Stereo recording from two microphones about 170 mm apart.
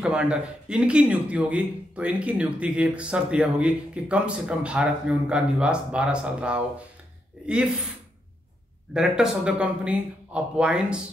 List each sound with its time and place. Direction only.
0.0 s speech: 5° right (ahead or behind)
8.9 s speech: 5° right (ahead or behind)